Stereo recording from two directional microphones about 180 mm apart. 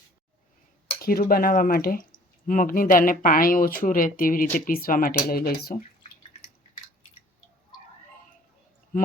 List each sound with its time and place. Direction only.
0.9 s speech: 55° left (ahead or behind)